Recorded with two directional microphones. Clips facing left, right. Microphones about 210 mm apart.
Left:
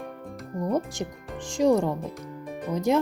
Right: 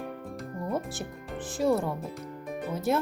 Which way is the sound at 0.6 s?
20° left (ahead or behind).